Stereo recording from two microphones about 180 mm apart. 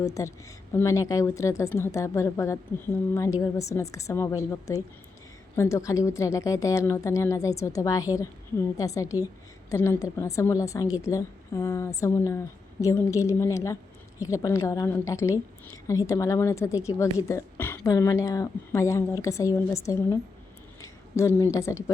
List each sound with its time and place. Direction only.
0.0 s a woman's voice: 15° left (ahead or behind)